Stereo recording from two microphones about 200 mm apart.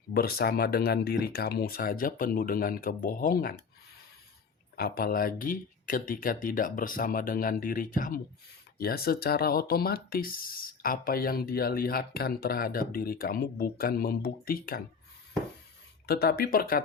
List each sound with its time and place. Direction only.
0.1 s speech: 50° left (ahead or behind)
4.8 s speech: 50° left (ahead or behind)
16.0 s speech: 50° left (ahead or behind)